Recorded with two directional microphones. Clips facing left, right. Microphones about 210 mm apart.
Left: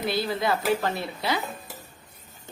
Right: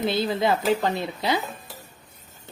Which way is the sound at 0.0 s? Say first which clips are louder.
Right 3 dB; 20° right (ahead or behind).